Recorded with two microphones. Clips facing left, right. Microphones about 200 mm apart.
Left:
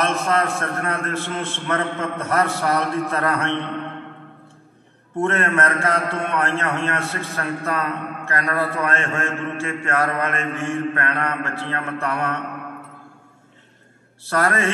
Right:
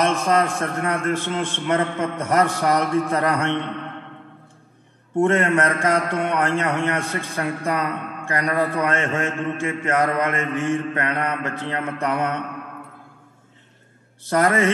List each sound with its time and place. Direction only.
0.0 s a man's voice: 15° right (ahead or behind)
5.1 s a man's voice: 15° right (ahead or behind)
14.2 s a man's voice: 20° right (ahead or behind)